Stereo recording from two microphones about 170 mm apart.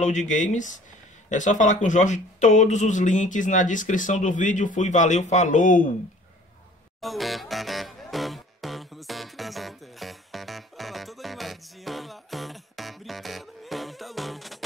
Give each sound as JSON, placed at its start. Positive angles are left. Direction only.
{"t": 0.0, "sound": "speech", "side_deg": 45}
{"t": 7.0, "sound": "music", "side_deg": 0}